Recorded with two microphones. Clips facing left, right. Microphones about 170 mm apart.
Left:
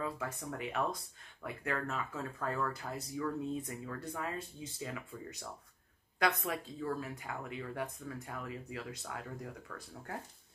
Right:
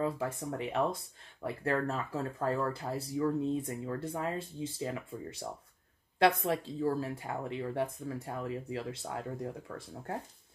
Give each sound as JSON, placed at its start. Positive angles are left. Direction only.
{"t": 0.0, "sound": "speech", "side_deg": -25}